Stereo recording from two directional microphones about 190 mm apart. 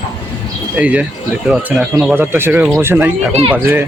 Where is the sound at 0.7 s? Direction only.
5° right (ahead or behind).